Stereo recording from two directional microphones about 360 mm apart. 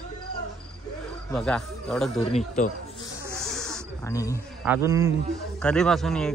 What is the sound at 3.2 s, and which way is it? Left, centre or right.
Snake, centre.